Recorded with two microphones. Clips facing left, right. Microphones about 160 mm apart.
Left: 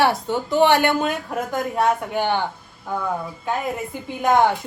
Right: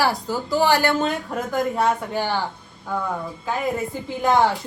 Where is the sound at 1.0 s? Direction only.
10° left (ahead or behind).